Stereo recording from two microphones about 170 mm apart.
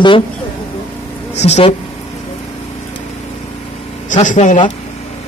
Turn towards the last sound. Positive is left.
turn(degrees=50)  # may be behind; listen again after turning